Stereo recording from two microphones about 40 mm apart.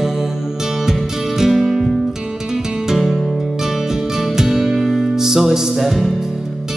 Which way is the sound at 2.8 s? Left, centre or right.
Centre.